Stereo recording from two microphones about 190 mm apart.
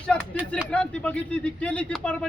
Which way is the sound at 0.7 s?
5° left (ahead or behind).